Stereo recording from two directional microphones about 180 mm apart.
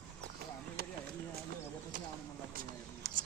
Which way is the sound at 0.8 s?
60° right (ahead or behind).